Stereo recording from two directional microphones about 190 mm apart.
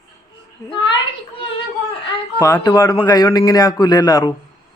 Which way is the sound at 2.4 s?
20° left (ahead or behind).